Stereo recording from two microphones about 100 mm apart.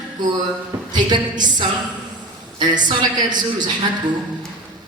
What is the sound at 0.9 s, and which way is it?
A man's voice, 45° right (ahead or behind).